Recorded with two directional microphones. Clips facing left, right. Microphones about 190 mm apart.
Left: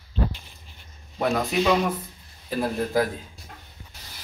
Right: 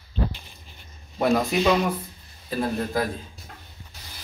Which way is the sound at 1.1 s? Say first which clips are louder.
Right 2 dB; 5° right (ahead or behind).